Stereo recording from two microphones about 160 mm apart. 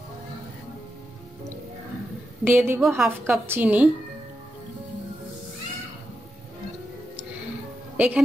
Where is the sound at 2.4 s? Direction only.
15° right (ahead or behind).